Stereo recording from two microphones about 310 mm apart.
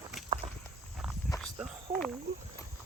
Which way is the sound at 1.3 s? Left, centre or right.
Centre.